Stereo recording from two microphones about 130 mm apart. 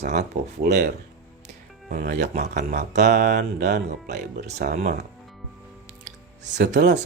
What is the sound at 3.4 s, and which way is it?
Speech, 70° right (ahead or behind).